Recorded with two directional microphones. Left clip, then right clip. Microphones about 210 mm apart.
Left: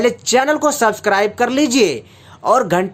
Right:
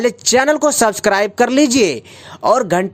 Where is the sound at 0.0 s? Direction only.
40° right (ahead or behind).